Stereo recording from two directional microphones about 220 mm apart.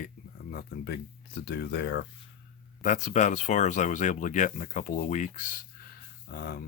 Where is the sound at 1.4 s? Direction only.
50° left (ahead or behind).